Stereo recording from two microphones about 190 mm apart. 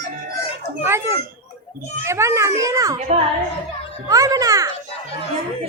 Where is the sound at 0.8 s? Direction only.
15° right (ahead or behind).